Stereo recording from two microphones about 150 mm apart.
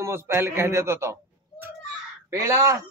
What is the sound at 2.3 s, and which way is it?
Speech, 20° right (ahead or behind).